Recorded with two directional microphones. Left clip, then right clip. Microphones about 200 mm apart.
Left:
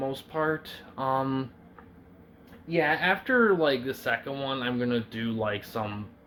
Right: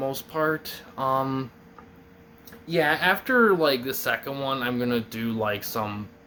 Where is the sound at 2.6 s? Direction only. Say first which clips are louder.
Right 3 dB; 20° right (ahead or behind).